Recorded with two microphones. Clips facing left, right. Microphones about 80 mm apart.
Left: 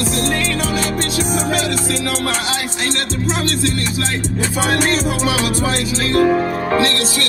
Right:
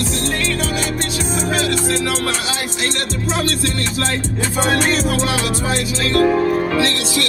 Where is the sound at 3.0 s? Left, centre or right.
Left.